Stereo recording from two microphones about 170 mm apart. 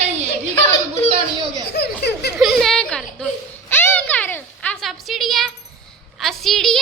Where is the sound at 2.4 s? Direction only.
Centre (ahead or behind).